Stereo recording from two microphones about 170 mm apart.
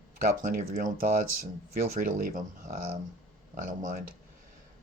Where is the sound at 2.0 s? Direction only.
55° right (ahead or behind).